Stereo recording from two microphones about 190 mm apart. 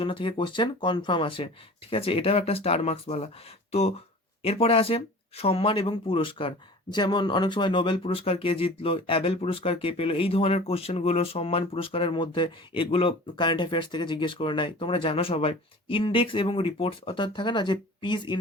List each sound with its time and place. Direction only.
0.0 s speech: 25° left (ahead or behind)